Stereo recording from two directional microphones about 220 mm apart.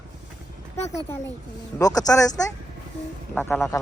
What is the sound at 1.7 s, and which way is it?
A man's voice, 15° left (ahead or behind).